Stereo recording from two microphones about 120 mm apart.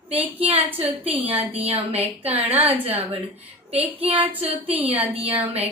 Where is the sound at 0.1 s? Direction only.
55° right (ahead or behind).